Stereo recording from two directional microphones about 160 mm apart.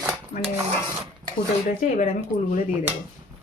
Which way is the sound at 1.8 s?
50° left (ahead or behind).